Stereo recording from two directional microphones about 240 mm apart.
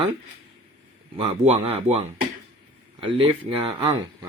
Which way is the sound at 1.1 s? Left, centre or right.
Right.